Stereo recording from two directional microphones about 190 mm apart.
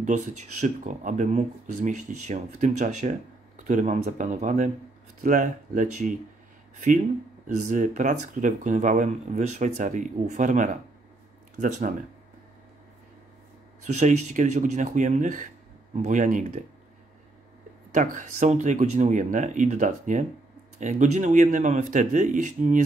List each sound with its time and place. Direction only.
0.0 s speech: 40° right (ahead or behind)
7.5 s speech: 40° right (ahead or behind)
13.9 s speech: 40° right (ahead or behind)
17.9 s speech: 40° right (ahead or behind)